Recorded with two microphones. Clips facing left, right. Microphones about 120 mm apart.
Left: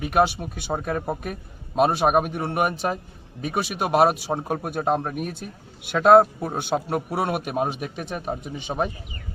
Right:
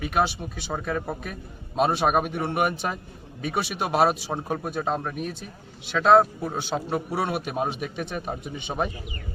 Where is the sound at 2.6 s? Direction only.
40° left (ahead or behind).